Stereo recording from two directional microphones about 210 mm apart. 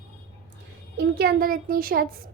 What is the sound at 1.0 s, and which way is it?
A woman's voice, 50° right (ahead or behind).